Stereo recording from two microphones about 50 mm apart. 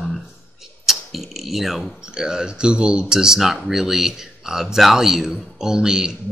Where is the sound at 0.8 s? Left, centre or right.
Centre.